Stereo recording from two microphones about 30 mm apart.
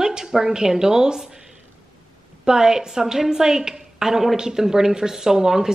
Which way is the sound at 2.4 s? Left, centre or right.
Right.